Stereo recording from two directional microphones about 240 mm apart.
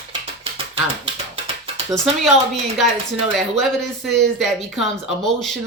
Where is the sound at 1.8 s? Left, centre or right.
Centre.